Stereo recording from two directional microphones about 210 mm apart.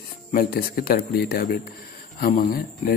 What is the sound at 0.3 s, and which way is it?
Speech, 45° left (ahead or behind).